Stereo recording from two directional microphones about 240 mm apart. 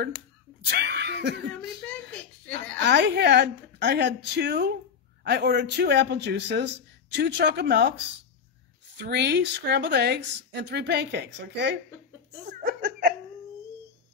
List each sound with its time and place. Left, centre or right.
0.7 s speech: right
2.8 s a man's voice: right
9.0 s a man's voice: right